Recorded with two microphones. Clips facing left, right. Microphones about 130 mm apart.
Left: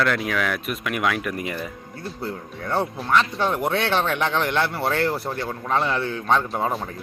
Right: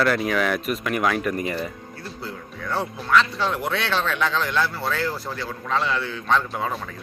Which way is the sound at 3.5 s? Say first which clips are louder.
Left 5 dB; 50° left (ahead or behind).